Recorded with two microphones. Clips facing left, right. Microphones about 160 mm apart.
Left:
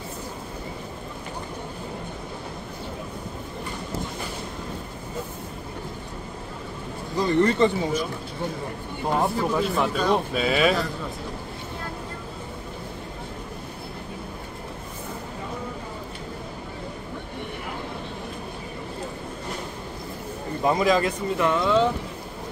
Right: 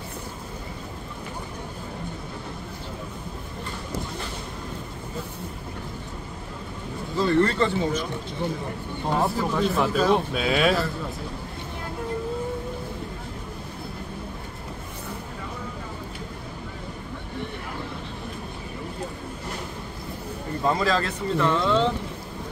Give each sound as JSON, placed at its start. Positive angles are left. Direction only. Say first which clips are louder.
{"t": 7.2, "sound": "speech", "louder": "left 1 dB", "side_deg": 15}
{"t": 9.1, "sound": "speech", "louder": "left 1 dB", "side_deg": 0}
{"t": 20.6, "sound": "speech", "louder": "left 3 dB", "side_deg": 15}